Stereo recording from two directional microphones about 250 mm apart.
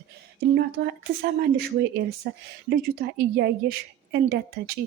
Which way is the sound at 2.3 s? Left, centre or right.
Right.